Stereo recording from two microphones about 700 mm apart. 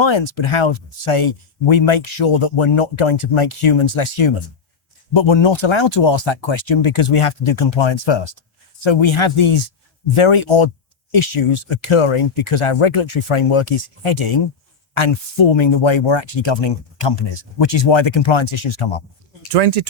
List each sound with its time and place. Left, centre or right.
0.0 s speech: left
19.5 s speech: right